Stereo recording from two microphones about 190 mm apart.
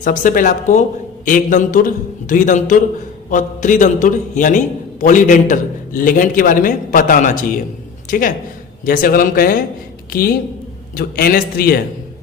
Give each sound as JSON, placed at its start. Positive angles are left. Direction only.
{"t": 0.0, "sound": "a man's voice", "side_deg": 45}
{"t": 8.8, "sound": "a man's voice", "side_deg": 50}